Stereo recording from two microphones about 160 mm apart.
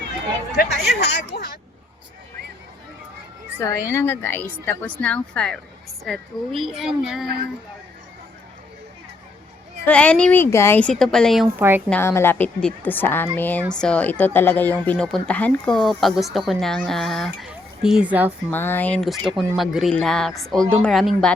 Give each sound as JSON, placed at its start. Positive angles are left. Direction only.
{"t": 0.6, "sound": "speech", "side_deg": 90}
{"t": 3.6, "sound": "speech", "side_deg": 20}
{"t": 9.8, "sound": "speech", "side_deg": 5}
{"t": 11.4, "sound": "a woman's voice", "side_deg": -15}
{"t": 11.9, "sound": "speech", "side_deg": 15}
{"t": 18.5, "sound": "speech", "side_deg": 10}